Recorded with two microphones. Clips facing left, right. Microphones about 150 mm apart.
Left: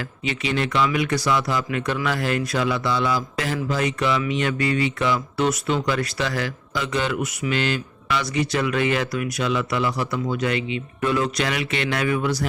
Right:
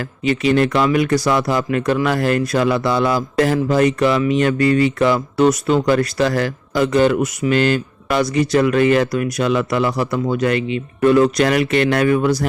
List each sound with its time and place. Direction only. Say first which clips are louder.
0.3 s a man's voice: right 9 dB; 50° right (ahead or behind)